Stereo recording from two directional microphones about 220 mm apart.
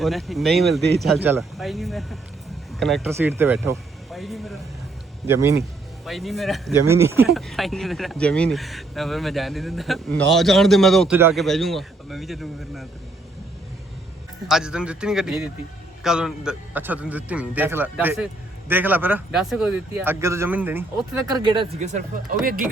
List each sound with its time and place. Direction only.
0.0 s speech: centre (ahead or behind)
4.1 s speech: centre (ahead or behind)
5.2 s speech: 10° right (ahead or behind)
6.1 s speech: centre (ahead or behind)
6.8 s speech: 10° right (ahead or behind)
7.3 s speech: centre (ahead or behind)
14.4 s speech: 5° right (ahead or behind)
21.2 s speech: 20° right (ahead or behind)